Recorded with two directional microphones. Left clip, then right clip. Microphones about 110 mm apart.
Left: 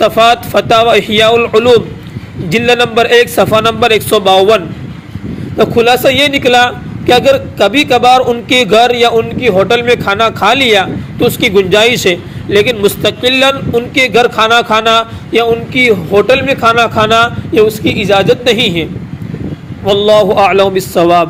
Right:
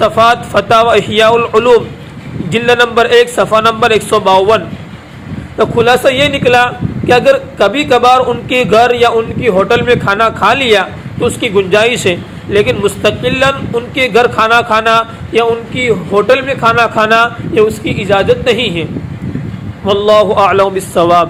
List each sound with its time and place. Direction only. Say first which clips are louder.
0.0 s a man's voice: left 1 dB; 55° left (ahead or behind)
3.4 s a man's voice: even; 40° left (ahead or behind); by 8.2 s 55° left (ahead or behind)
8.3 s a man's voice: left 2 dB; 40° left (ahead or behind)
8.7 s a man's voice: right 1 dB; 55° left (ahead or behind)
9.8 s a man's voice: even; 45° left (ahead or behind)
12.5 s a man's voice: left 2 dB; 55° left (ahead or behind)
14.3 s a man's voice: even; 40° left (ahead or behind)
15.3 s a man's voice: left 2 dB; 60° left (ahead or behind)
16.9 s a man's voice: even; 30° left (ahead or behind)
17.5 s a man's voice: left 2 dB; 50° left (ahead or behind)
19.8 s a man's voice: left 1 dB; 60° left (ahead or behind)
20.4 s a man's voice: left 1 dB; 35° left (ahead or behind)